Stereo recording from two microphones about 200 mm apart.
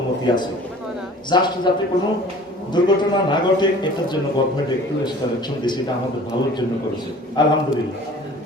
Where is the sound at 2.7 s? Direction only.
20° left (ahead or behind).